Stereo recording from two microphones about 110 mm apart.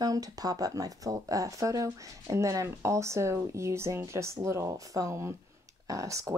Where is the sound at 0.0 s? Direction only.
35° right (ahead or behind).